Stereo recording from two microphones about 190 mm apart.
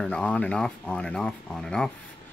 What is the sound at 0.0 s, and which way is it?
Speech, 5° left (ahead or behind).